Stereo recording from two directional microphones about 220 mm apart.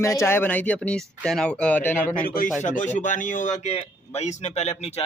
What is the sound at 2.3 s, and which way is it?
Speech, 35° left (ahead or behind).